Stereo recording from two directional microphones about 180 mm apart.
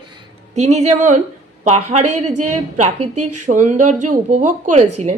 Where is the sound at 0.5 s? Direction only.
40° right (ahead or behind).